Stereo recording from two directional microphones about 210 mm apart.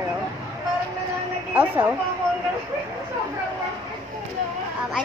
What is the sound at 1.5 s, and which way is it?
Speech, 10° right (ahead or behind).